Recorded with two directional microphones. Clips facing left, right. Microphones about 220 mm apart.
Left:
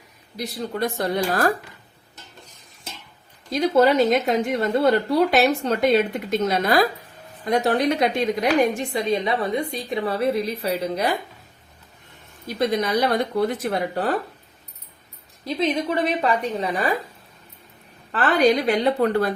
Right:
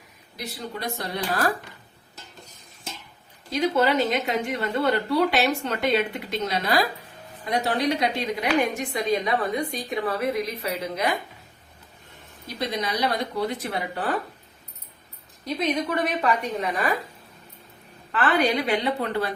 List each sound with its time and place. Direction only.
0.3 s speech: 45° left (ahead or behind)
3.5 s speech: 40° left (ahead or behind)
8.7 s a woman's voice: 30° left (ahead or behind)
12.5 s speech: 50° left (ahead or behind)
15.5 s a woman's voice: 30° left (ahead or behind)
18.1 s speech: 35° left (ahead or behind)